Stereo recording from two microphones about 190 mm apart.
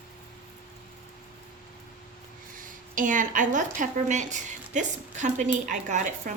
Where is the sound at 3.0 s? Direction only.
45° right (ahead or behind).